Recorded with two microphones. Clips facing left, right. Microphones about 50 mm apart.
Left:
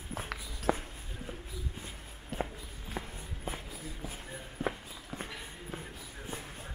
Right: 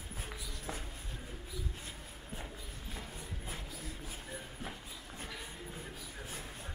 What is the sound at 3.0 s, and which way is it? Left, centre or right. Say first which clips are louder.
Walk: left 6 dB; left.